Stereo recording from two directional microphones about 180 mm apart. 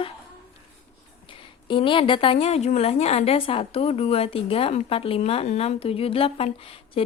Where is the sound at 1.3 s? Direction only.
30° left (ahead or behind).